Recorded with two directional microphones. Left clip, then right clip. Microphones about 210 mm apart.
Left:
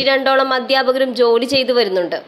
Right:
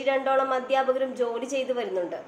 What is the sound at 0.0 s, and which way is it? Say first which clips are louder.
A woman's voice: left 10 dB; 50° left (ahead or behind).